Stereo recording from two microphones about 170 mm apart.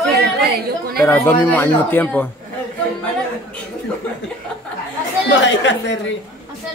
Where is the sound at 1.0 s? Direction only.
10° left (ahead or behind).